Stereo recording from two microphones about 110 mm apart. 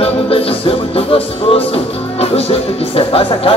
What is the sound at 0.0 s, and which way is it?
Music, 60° left (ahead or behind).